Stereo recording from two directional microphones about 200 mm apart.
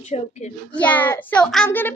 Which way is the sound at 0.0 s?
35° left (ahead or behind).